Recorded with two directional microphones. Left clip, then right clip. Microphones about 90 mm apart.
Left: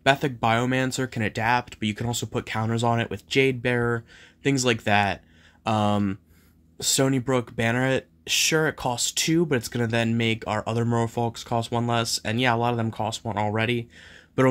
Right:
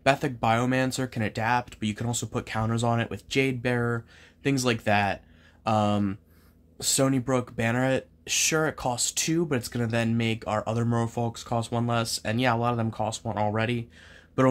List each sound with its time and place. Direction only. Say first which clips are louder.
0.0 s speech: left 2 dB; 20° left (ahead or behind)